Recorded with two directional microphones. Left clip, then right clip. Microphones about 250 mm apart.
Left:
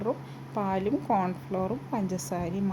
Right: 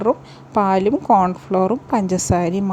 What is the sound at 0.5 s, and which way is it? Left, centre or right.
A woman's voice, right.